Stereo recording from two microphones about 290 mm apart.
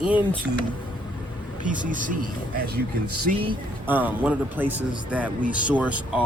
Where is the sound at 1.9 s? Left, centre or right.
Right.